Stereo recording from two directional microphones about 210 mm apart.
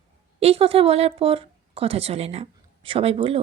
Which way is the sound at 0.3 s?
30° right (ahead or behind).